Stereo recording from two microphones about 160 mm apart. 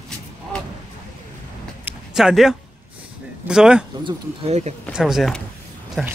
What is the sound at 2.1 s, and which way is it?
Speech, 5° right (ahead or behind).